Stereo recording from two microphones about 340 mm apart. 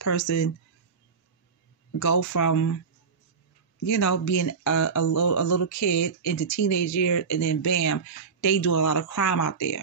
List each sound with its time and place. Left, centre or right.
0.2 s speech: left
2.0 s speech: left
3.8 s speech: left